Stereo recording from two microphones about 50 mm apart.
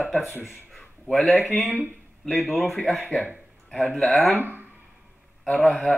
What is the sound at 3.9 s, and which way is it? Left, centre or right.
Speech, centre.